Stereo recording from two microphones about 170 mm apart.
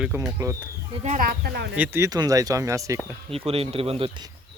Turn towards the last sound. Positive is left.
turn(degrees=-35)  # may be behind; listen again after turning